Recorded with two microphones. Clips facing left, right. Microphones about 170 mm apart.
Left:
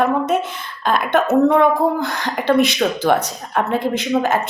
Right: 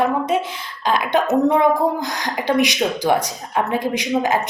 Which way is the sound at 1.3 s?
15° right (ahead or behind).